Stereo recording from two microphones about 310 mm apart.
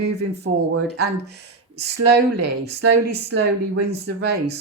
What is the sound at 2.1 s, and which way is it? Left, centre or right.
A woman's voice, right.